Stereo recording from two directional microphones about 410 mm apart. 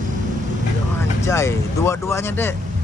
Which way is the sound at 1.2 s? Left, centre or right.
Centre.